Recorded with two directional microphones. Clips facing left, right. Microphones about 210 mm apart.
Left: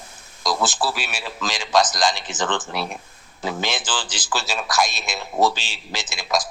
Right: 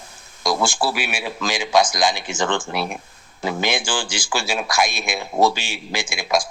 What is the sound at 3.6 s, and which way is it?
Speech, 60° right (ahead or behind).